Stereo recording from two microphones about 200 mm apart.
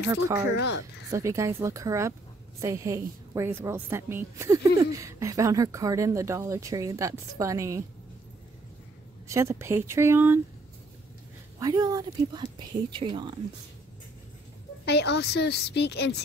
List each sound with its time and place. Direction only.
0.6 s a woman's voice: 60° left (ahead or behind)
1.1 s a woman's voice: 15° right (ahead or behind)
9.3 s a woman's voice: 15° right (ahead or behind)
11.6 s speech: 15° right (ahead or behind)
14.9 s a woman's voice: 55° left (ahead or behind)